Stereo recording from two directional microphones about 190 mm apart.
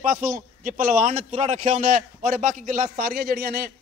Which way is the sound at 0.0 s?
45° right (ahead or behind).